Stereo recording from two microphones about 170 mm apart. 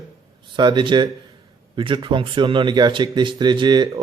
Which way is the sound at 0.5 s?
25° right (ahead or behind).